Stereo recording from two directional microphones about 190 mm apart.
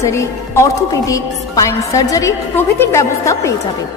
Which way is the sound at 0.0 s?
15° left (ahead or behind).